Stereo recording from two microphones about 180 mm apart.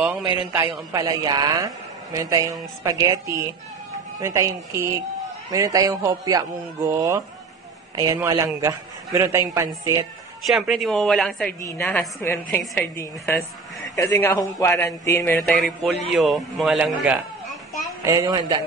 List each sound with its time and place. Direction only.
0.7 s a man's voice: 25° right (ahead or behind)
10.4 s a woman's voice: centre (ahead or behind)
18.0 s speech: 20° right (ahead or behind)